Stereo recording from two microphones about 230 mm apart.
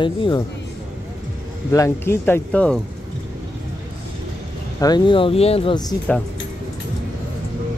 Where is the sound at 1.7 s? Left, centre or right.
Centre.